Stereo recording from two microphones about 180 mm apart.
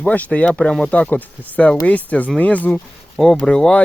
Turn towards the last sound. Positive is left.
turn(degrees=5)  # may be behind; listen again after turning